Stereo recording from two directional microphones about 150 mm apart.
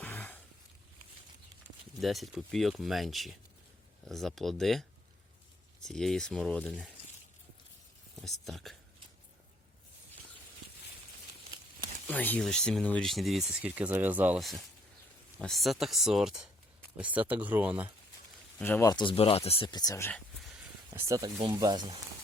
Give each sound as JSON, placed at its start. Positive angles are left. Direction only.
{"t": 0.0, "sound": "a sound", "side_deg": 10}
{"t": 2.0, "sound": "speech", "side_deg": 0}
{"t": 8.1, "sound": "speech", "side_deg": 0}
{"t": 12.0, "sound": "speech", "side_deg": 10}
{"t": 15.4, "sound": "speech", "side_deg": 0}
{"t": 18.6, "sound": "speech", "side_deg": 10}
{"t": 18.9, "sound": "speech", "side_deg": 30}
{"t": 20.9, "sound": "speech", "side_deg": -20}